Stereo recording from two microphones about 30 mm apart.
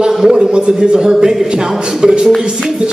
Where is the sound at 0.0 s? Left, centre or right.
Right.